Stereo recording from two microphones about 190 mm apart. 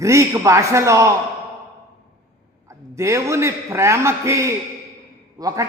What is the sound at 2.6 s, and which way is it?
A man's voice, 15° right (ahead or behind).